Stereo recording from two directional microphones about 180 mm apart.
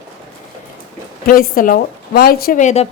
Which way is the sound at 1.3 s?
50° left (ahead or behind).